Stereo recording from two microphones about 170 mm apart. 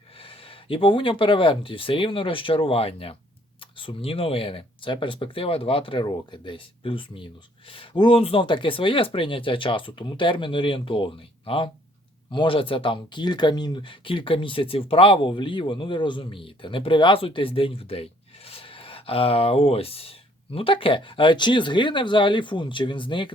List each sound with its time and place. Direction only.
0.2 s speech: 30° left (ahead or behind)